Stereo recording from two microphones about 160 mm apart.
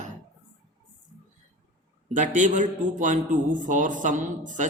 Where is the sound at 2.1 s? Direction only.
50° right (ahead or behind).